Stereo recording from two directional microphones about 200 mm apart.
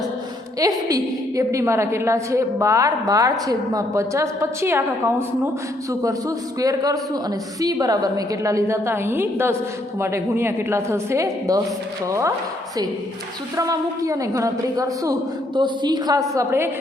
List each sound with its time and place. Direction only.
0.6 s a woman's voice: 20° right (ahead or behind)
13.6 s a woman's voice: 15° right (ahead or behind)